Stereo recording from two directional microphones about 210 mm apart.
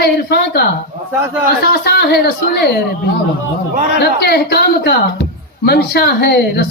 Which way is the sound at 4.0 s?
50° left (ahead or behind).